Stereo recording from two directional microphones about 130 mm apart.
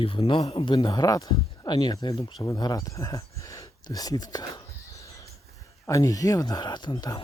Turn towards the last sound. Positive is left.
turn(degrees=30)  # may be behind; listen again after turning